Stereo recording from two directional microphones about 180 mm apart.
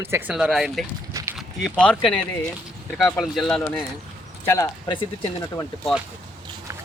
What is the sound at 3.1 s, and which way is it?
Speech, centre (ahead or behind).